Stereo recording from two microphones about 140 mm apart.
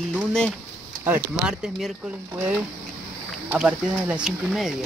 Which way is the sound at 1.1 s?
5° right (ahead or behind).